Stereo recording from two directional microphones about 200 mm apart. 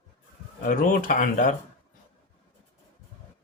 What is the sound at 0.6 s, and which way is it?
Speech, 45° left (ahead or behind).